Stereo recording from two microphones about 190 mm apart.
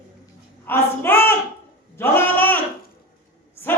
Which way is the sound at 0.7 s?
10° left (ahead or behind).